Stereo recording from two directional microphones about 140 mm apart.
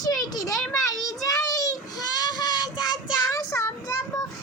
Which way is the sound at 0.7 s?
25° left (ahead or behind).